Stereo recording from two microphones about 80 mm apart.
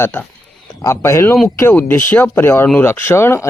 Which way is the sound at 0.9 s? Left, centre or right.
Left.